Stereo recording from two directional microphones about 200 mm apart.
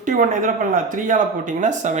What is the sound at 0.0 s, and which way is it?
Speech, 40° right (ahead or behind).